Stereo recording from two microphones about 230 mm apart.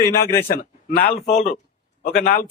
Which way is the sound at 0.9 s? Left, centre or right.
Left.